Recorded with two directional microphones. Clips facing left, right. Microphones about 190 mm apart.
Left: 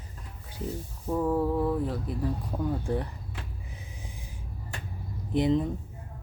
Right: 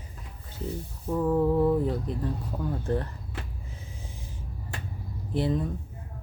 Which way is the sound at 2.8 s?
15° left (ahead or behind).